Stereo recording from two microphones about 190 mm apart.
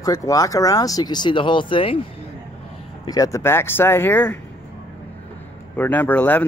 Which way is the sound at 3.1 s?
15° left (ahead or behind).